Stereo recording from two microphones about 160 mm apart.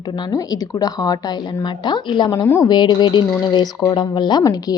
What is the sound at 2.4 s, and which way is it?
Speech, 15° left (ahead or behind).